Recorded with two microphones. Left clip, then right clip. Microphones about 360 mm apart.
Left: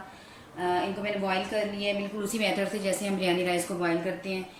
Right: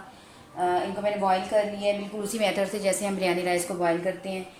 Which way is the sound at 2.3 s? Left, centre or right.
Centre.